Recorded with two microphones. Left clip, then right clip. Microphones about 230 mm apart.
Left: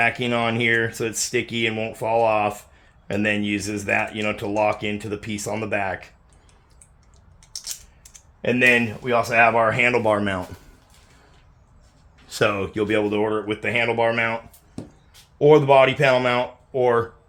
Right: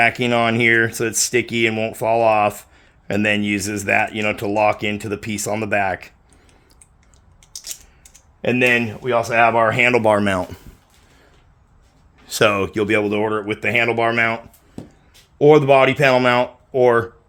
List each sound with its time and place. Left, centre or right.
0.0 s speech: right
8.4 s speech: right
12.2 s speech: right